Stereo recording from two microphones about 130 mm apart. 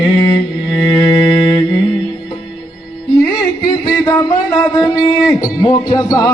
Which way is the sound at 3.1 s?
30° left (ahead or behind).